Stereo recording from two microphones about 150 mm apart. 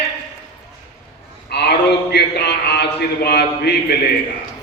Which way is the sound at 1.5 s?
90° left.